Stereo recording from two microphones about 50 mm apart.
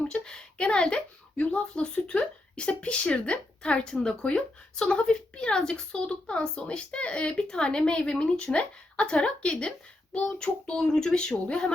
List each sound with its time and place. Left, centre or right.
0.1 s speech: centre
10.8 s speech: centre